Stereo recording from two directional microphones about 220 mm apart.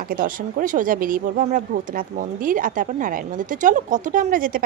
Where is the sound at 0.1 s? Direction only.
40° right (ahead or behind).